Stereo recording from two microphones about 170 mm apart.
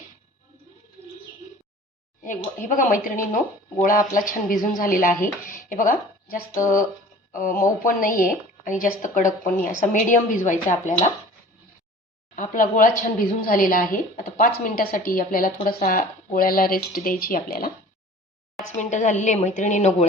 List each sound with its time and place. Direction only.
2.6 s a woman's voice: 50° left (ahead or behind)
12.4 s speech: 50° left (ahead or behind)
18.6 s a woman's voice: 45° left (ahead or behind)